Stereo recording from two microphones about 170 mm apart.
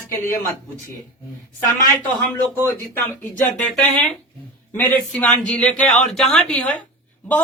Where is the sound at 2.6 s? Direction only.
15° left (ahead or behind).